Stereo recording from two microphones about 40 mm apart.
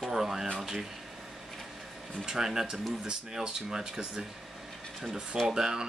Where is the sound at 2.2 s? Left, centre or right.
Centre.